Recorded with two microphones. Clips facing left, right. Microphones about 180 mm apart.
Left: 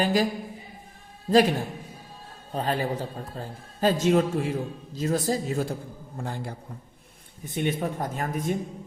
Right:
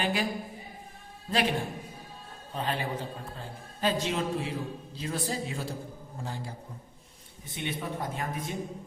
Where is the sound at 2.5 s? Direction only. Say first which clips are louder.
Left 5 dB; 40° left (ahead or behind).